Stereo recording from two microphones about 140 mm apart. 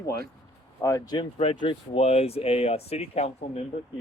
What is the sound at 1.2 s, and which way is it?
Speech, 40° left (ahead or behind).